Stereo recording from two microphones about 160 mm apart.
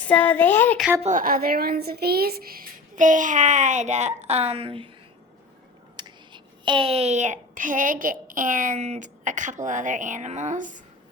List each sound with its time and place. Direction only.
0.0 s speech: 10° left (ahead or behind)
1.0 s a woman's voice: 55° right (ahead or behind); by 4.9 s 35° right (ahead or behind)
6.0 s a child's voice: 30° right (ahead or behind); by 10.8 s 50° right (ahead or behind)